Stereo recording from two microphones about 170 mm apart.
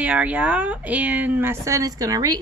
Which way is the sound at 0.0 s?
10° right (ahead or behind).